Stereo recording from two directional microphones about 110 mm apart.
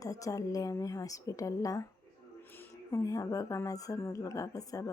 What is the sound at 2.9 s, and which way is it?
Speech, 30° left (ahead or behind).